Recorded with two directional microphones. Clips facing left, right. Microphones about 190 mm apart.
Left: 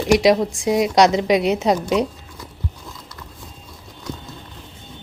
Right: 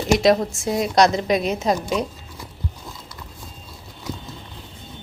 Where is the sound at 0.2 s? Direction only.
15° left (ahead or behind).